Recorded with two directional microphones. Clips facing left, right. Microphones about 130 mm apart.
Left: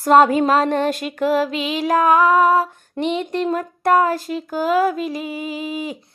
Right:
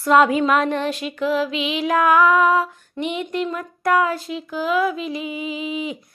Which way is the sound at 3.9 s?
45° left (ahead or behind).